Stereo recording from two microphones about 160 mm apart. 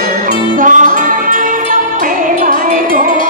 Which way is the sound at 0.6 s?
55° right (ahead or behind).